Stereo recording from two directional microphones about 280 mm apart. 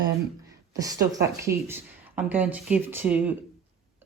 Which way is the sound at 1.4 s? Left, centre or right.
Centre.